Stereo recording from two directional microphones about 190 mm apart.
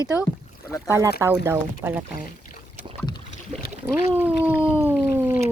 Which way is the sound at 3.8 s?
10° right (ahead or behind).